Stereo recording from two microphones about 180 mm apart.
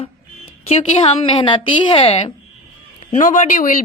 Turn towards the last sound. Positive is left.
turn(degrees=45)  # may be behind; listen again after turning